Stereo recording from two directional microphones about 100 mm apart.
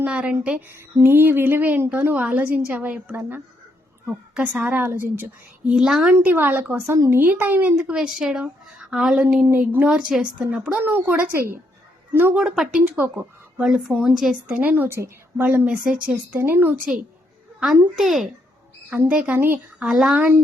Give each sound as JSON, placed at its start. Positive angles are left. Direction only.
{"t": 0.0, "sound": "a woman's voice", "side_deg": -10}
{"t": 5.7, "sound": "a woman's voice", "side_deg": -5}
{"t": 6.1, "sound": "a woman's voice", "side_deg": -20}
{"t": 7.8, "sound": "a woman's voice", "side_deg": -5}
{"t": 9.5, "sound": "a woman's voice", "side_deg": -20}
{"t": 9.9, "sound": "a woman's voice", "side_deg": -5}
{"t": 13.6, "sound": "a woman's voice", "side_deg": -5}
{"t": 14.5, "sound": "a woman's voice", "side_deg": -15}
{"t": 17.6, "sound": "a woman's voice", "side_deg": -5}
{"t": 18.9, "sound": "a woman's voice", "side_deg": -15}
{"t": 19.8, "sound": "a woman's voice", "side_deg": -5}
{"t": 20.1, "sound": "a woman's voice", "side_deg": -15}